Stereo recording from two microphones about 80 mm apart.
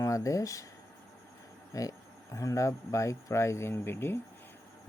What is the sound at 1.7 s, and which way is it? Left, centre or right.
Speech, left.